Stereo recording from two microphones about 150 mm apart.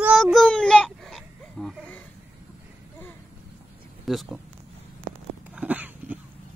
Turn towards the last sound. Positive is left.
turn(degrees=-10)  # may be behind; listen again after turning